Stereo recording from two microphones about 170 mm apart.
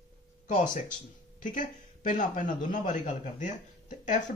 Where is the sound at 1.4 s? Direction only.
50° left (ahead or behind).